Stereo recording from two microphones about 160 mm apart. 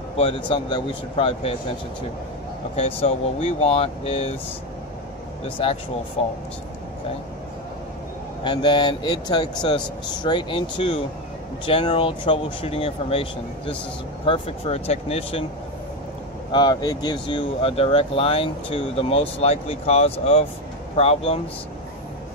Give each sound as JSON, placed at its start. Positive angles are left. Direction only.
{"t": 0.2, "sound": "speech", "side_deg": 35}
{"t": 2.7, "sound": "speech", "side_deg": 40}
{"t": 5.6, "sound": "speech", "side_deg": 35}
{"t": 8.5, "sound": "speech", "side_deg": 30}
{"t": 16.5, "sound": "speech", "side_deg": 25}